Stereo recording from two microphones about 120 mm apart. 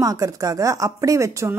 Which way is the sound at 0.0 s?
30° right (ahead or behind).